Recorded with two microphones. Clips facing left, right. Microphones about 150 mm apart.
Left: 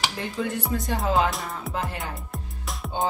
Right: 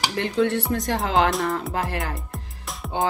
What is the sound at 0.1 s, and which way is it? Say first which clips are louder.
Music: right 7 dB; 75° right (ahead or behind).